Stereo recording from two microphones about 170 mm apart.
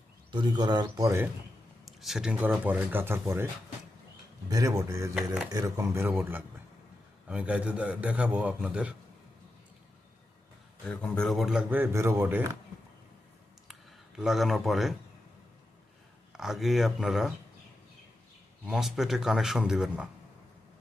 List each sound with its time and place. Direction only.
0.3 s speech: 25° right (ahead or behind)
1.8 s a man's voice: centre (ahead or behind)
4.4 s a man's voice: 20° right (ahead or behind)
5.1 s speech: 5° right (ahead or behind)
5.5 s a man's voice: 20° right (ahead or behind)
10.8 s speech: 5° left (ahead or behind); by 12.4 s 15° right (ahead or behind)
14.2 s speech: centre (ahead or behind)
16.3 s speech: centre (ahead or behind)
18.6 s speech: centre (ahead or behind)